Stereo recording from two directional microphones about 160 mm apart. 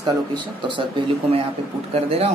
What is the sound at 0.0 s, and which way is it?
Speech, 30° right (ahead or behind).